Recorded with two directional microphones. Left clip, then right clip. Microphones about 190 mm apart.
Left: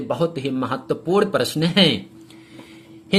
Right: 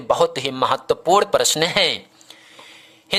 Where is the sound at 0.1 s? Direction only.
50° right (ahead or behind).